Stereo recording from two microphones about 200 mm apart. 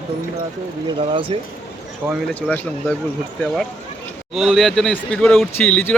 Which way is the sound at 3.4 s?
5° left (ahead or behind).